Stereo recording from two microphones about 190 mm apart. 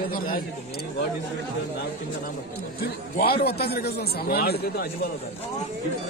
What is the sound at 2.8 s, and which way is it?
A man's voice, 55° left (ahead or behind).